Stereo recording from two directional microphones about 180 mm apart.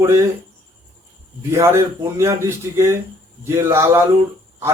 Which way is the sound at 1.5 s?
15° right (ahead or behind).